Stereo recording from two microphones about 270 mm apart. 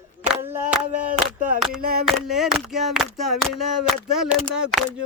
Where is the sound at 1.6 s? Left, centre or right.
Centre.